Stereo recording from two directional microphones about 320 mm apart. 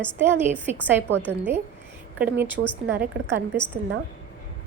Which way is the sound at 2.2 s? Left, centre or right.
Centre.